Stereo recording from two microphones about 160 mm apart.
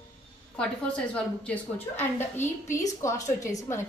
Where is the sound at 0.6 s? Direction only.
5° left (ahead or behind).